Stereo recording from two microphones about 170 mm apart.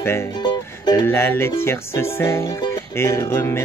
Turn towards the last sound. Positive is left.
turn(degrees=15)  # may be behind; listen again after turning